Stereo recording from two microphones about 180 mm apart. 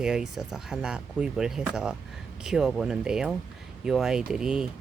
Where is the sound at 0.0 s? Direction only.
Centre (ahead or behind).